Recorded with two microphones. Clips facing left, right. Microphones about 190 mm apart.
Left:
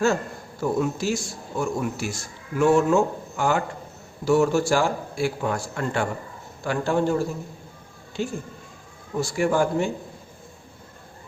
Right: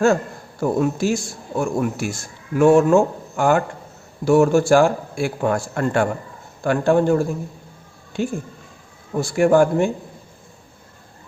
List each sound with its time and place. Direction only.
0.6 s a man's voice: 55° right (ahead or behind)
8.2 s a man's voice: 55° right (ahead or behind)